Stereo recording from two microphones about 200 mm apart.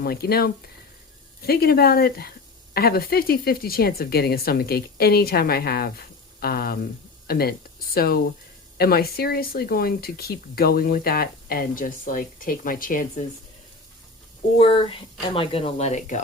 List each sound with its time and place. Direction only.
0.0 s speech: 50° left (ahead or behind)
14.6 s speech: 25° left (ahead or behind)